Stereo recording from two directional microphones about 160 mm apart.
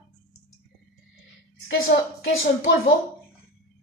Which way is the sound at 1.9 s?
90° left.